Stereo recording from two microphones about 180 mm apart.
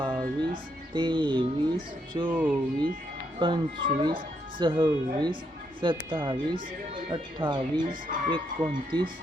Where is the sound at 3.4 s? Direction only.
25° right (ahead or behind).